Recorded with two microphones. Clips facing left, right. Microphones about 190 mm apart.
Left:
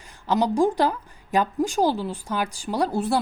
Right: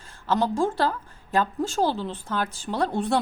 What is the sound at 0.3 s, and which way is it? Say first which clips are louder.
Speech: left 3 dB; 15° left (ahead or behind).